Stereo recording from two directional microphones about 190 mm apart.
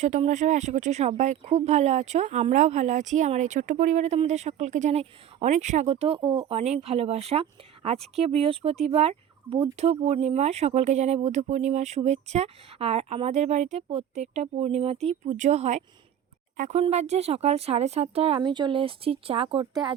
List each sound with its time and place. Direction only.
0.0 s speech: 40° right (ahead or behind)